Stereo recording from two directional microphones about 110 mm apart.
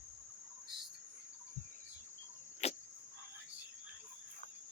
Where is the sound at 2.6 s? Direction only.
75° left (ahead or behind).